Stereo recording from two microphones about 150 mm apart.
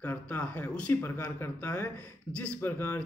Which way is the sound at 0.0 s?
10° left (ahead or behind).